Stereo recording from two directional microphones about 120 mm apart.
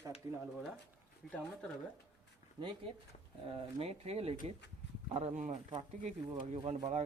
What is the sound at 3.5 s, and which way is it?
Speech, 55° right (ahead or behind).